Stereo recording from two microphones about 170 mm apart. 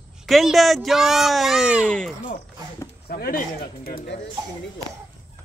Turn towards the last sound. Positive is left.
turn(degrees=60)  # may be behind; listen again after turning